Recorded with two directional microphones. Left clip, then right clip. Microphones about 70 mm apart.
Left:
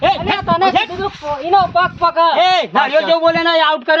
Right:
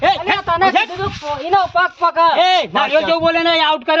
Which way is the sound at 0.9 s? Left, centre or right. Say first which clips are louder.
Left 1 dB; left.